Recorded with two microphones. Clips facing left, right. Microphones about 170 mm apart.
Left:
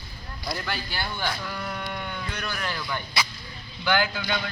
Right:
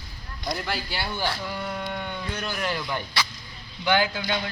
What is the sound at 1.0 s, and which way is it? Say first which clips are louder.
A man's voice: right 1 dB; 10° right (ahead or behind).